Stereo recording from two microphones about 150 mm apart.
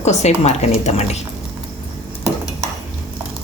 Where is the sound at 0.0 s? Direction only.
50° left (ahead or behind).